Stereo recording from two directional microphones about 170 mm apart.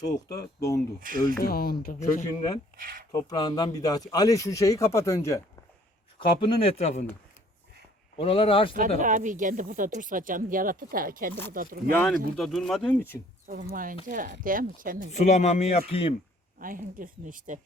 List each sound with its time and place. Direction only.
0.3 s speech: 20° left (ahead or behind)
1.0 s speech: 55° right (ahead or behind)
1.4 s speech: 60° left (ahead or behind)
2.0 s speech: 50° left (ahead or behind)
2.7 s speech: 55° right (ahead or behind)
3.1 s speech: 20° left (ahead or behind)
6.1 s speech: 30° left (ahead or behind)
8.2 s speech: 35° left (ahead or behind)
9.0 s speech: 50° right (ahead or behind)
11.9 s speech: 5° left (ahead or behind)
13.5 s speech: 55° right (ahead or behind)
15.1 s speech: 40° left (ahead or behind)
16.6 s speech: 55° right (ahead or behind)